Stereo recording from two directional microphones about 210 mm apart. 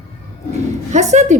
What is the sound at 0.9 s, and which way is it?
Speech, 35° right (ahead or behind).